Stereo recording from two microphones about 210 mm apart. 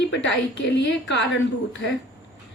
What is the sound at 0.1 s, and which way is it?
A woman's voice, 60° left (ahead or behind).